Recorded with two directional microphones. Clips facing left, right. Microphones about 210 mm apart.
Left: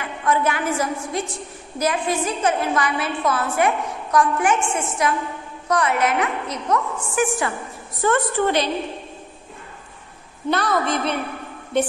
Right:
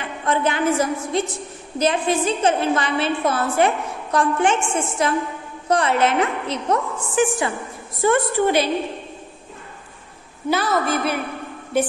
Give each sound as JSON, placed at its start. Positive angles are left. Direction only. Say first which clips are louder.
{"t": 0.2, "sound": "a woman's voice", "louder": "right 1 dB", "side_deg": -25}
{"t": 8.0, "sound": "a woman's voice", "louder": "right 2 dB", "side_deg": -10}
{"t": 10.5, "sound": "a woman's voice", "louder": "right 1 dB", "side_deg": -5}